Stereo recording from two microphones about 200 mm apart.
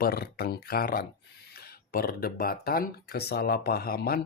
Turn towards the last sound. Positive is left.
turn(degrees=50)  # may be behind; listen again after turning